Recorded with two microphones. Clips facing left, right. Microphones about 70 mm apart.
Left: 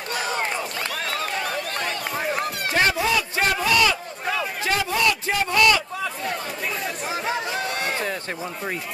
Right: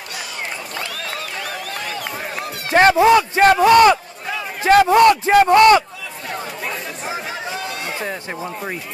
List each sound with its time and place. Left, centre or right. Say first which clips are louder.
2.7 s a man's voice: right 11 dB; right